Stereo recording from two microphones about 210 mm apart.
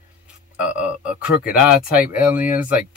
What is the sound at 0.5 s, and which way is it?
Speech, 5° right (ahead or behind).